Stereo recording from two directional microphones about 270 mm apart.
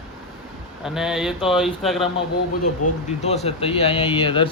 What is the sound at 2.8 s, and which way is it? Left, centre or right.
Speech, left.